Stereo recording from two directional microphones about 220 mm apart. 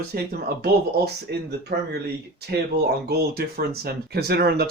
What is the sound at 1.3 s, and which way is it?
Speech, 50° right (ahead or behind).